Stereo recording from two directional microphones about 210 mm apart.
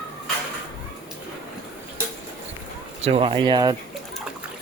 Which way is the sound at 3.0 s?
25° right (ahead or behind).